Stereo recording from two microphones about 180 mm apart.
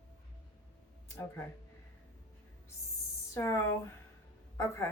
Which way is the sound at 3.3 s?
15° left (ahead or behind).